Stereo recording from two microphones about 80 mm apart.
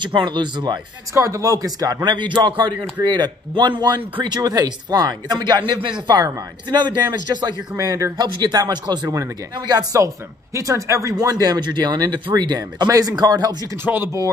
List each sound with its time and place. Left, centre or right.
0.0 s speech: right
1.1 s speech: right
2.1 s speech: right
7.7 s speech: right
13.8 s speech: right